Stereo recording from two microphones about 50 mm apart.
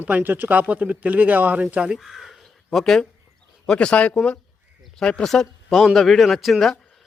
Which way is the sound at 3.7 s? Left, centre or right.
Left.